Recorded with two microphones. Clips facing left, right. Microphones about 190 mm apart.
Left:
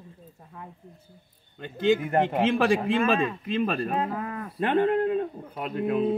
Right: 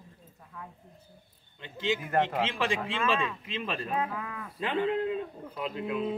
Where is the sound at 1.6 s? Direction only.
55° left (ahead or behind).